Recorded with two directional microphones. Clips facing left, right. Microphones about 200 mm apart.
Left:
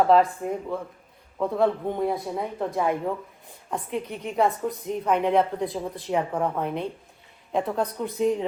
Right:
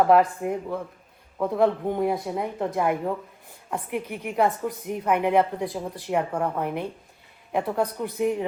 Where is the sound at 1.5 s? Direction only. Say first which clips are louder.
Right 2 dB; 15° right (ahead or behind).